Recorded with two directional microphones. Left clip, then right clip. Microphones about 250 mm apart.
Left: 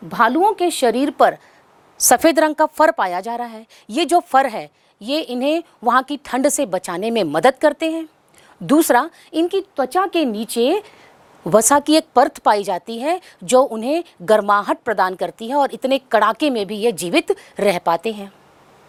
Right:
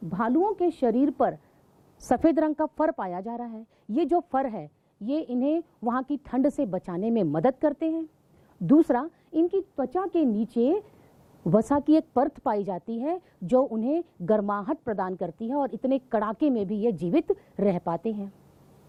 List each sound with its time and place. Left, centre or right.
0.1 s a woman's voice: centre